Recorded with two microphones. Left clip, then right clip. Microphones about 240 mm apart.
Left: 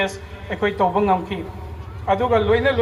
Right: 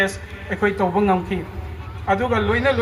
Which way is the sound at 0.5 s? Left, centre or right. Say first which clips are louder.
Left 1 dB; right.